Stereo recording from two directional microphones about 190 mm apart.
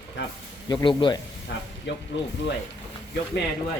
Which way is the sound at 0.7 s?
20° left (ahead or behind).